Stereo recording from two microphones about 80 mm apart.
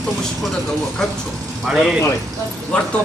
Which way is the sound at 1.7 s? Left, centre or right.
Centre.